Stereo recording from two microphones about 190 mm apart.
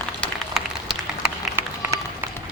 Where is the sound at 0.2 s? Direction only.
Centre (ahead or behind).